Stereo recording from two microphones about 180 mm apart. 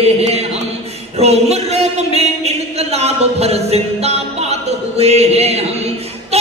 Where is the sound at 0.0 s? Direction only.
35° right (ahead or behind).